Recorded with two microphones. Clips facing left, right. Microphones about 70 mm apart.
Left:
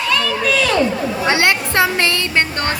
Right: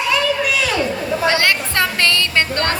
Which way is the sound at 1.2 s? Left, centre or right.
Left.